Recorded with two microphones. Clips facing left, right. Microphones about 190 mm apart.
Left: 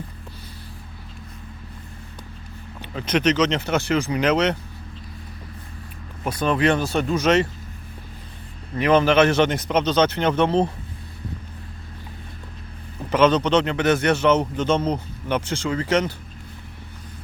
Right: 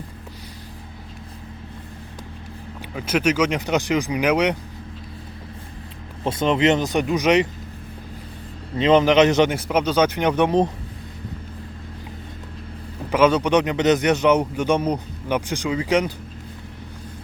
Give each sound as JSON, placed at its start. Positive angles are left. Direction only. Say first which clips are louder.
{"t": 2.9, "sound": "a man's voice", "louder": "even", "side_deg": -10}
{"t": 6.2, "sound": "speech", "louder": "right 2 dB", "side_deg": -20}
{"t": 8.7, "sound": "a man's voice", "louder": "right 2 dB", "side_deg": -20}
{"t": 13.1, "sound": "a man's voice", "louder": "even", "side_deg": -10}